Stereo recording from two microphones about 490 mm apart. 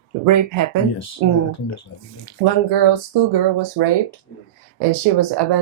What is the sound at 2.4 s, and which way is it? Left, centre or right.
Speech, right.